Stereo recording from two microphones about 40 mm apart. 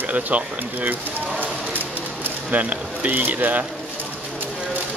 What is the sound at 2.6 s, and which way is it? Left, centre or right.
Speech, right.